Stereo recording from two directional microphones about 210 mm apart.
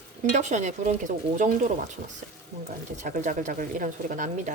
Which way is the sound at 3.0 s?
35° right (ahead or behind).